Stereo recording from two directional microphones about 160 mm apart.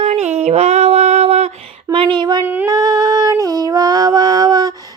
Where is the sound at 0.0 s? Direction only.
45° right (ahead or behind).